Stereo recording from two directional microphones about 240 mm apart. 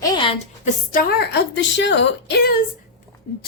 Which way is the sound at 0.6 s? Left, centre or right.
Left.